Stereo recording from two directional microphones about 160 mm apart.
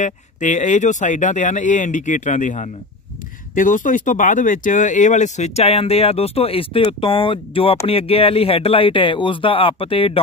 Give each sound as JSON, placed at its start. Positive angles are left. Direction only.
{"t": 0.0, "sound": "speech", "side_deg": 50}